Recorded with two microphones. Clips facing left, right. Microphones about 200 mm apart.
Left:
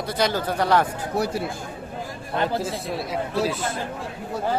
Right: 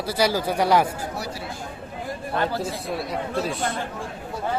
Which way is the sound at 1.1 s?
55° left (ahead or behind).